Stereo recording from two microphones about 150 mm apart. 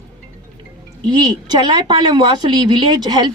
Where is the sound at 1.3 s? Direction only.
30° right (ahead or behind).